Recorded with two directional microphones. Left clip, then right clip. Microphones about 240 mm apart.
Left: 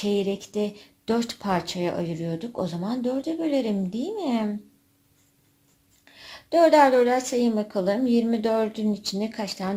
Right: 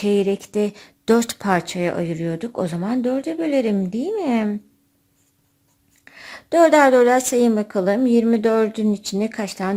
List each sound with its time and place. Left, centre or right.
0.0 s speech: right
6.1 s speech: right